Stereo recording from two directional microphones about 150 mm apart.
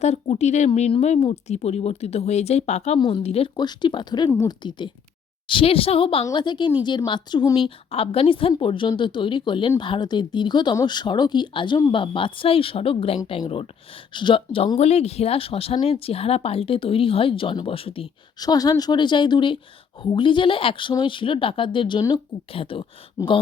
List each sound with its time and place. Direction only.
0.0 s a woman's voice: 45° left (ahead or behind)
3.6 s a woman's voice: 30° left (ahead or behind)
4.3 s a woman's voice: 20° left (ahead or behind)
5.5 s a woman's voice: 35° left (ahead or behind)
18.3 s a woman's voice: 25° left (ahead or behind)